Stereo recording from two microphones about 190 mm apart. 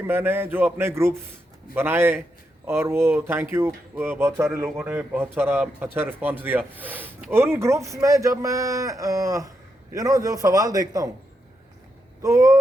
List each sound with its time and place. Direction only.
0.0 s a man's voice: 10° right (ahead or behind)
12.2 s speech: 15° right (ahead or behind)